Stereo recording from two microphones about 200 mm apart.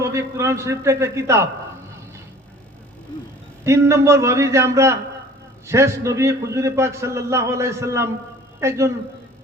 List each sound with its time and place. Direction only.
0.0 s a man's voice: 15° right (ahead or behind)
3.6 s a man's voice: 15° right (ahead or behind)